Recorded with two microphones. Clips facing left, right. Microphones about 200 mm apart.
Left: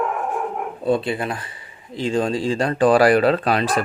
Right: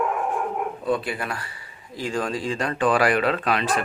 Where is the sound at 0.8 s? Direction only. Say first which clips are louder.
Left 7 dB; 25° left (ahead or behind).